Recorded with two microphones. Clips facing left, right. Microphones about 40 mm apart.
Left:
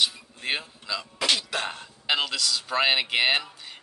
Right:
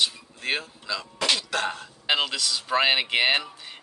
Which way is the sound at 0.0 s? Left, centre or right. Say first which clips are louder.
Even; centre.